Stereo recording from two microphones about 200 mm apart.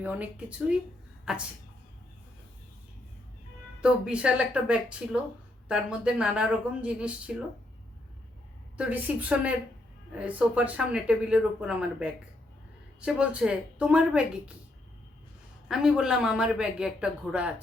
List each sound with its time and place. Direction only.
0.0 s speech: 5° right (ahead or behind)
3.8 s speech: 5° right (ahead or behind)
8.8 s speech: 5° right (ahead or behind)
15.7 s speech: 5° right (ahead or behind)